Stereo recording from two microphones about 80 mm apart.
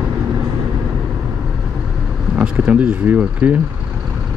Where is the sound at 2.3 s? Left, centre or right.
Centre.